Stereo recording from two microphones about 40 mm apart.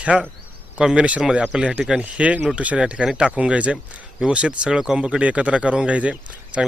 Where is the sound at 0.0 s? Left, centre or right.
Right.